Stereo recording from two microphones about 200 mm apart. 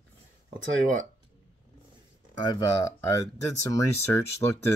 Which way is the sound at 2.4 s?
20° left (ahead or behind).